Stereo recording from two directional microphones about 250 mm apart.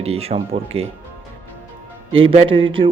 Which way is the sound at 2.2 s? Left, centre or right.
Right.